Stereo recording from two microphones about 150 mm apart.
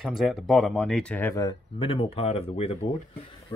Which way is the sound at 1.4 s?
35° left (ahead or behind).